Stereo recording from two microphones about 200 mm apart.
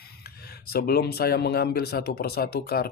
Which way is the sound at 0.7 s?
50° left (ahead or behind).